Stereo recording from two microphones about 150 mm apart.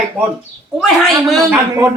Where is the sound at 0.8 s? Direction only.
5° left (ahead or behind).